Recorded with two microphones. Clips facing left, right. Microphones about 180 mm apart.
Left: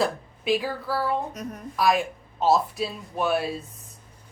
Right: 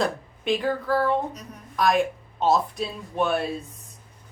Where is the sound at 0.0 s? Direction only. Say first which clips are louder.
Even; 5° left (ahead or behind).